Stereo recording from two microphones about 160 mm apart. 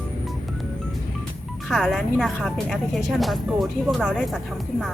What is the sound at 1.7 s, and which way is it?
A woman's voice, centre (ahead or behind).